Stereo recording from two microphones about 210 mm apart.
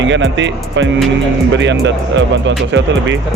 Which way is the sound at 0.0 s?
60° right (ahead or behind).